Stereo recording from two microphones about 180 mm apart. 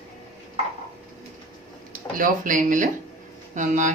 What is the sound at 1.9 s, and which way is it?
Speech, 50° right (ahead or behind).